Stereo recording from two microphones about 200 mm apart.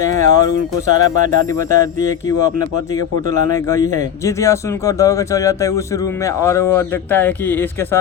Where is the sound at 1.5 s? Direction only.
15° left (ahead or behind).